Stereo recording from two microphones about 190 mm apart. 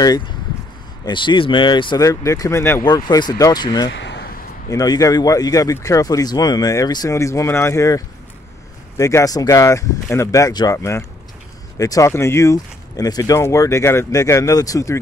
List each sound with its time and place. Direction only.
1.0 s speech: 25° left (ahead or behind)
3.9 s a sound: 65° left (ahead or behind)
4.6 s speech: 20° left (ahead or behind)